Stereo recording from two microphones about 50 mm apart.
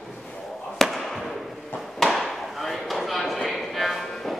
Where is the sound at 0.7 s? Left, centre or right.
Centre.